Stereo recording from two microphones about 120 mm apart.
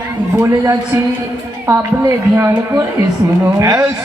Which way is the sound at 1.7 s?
25° right (ahead or behind).